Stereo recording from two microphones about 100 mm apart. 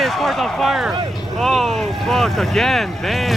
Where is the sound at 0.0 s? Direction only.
Centre (ahead or behind).